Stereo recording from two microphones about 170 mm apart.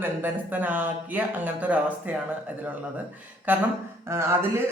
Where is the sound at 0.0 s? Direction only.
10° right (ahead or behind).